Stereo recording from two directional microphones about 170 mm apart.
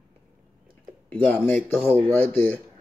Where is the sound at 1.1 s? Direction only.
10° left (ahead or behind).